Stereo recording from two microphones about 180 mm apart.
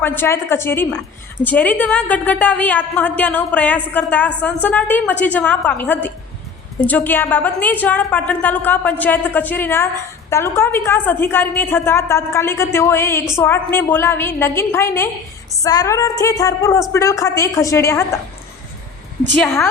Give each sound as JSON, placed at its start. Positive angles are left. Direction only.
{"t": 0.0, "sound": "a woman's voice", "side_deg": 10}
{"t": 19.3, "sound": "a woman's voice", "side_deg": 10}